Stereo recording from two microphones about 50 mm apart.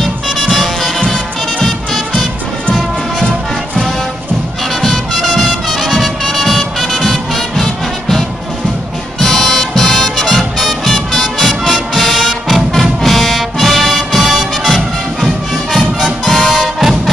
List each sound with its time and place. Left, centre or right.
0.5 s music: centre
4.8 s music: centre
9.2 s music: centre